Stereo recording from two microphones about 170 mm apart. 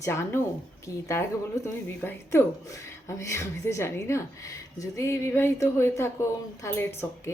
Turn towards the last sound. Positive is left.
turn(degrees=15)  # may be behind; listen again after turning